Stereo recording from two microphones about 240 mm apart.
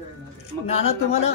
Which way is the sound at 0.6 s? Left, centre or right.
Left.